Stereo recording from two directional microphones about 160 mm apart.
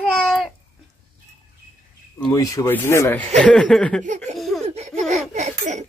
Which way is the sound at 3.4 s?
5° left (ahead or behind).